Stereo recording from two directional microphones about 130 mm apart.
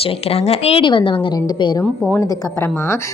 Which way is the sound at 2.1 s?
20° left (ahead or behind).